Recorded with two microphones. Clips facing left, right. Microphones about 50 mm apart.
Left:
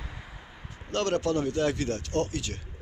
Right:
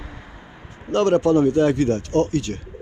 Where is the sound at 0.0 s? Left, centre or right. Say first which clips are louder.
Right 5 dB; centre.